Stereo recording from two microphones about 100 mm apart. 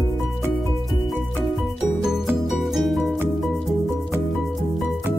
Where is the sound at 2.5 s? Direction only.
Centre (ahead or behind).